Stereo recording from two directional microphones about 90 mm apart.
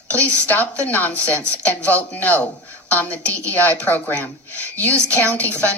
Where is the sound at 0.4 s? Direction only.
20° left (ahead or behind).